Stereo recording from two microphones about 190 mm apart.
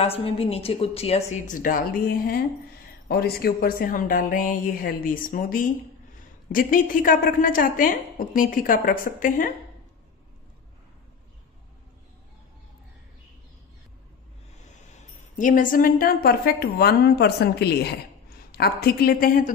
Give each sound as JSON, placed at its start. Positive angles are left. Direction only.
{"t": 0.0, "sound": "a woman's voice", "side_deg": 30}
{"t": 15.3, "sound": "a woman's voice", "side_deg": 45}